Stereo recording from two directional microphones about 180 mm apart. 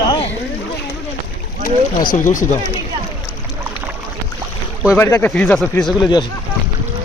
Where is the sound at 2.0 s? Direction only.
45° left (ahead or behind).